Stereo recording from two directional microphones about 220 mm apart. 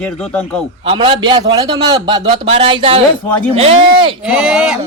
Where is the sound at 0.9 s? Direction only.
20° right (ahead or behind).